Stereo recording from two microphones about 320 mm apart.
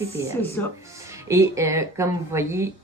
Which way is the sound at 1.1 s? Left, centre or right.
Centre.